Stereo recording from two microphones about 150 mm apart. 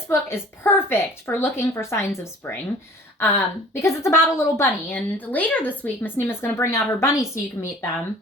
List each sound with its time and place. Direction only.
0.1 s a woman's voice: 15° left (ahead or behind)
3.2 s a woman's voice: 15° left (ahead or behind)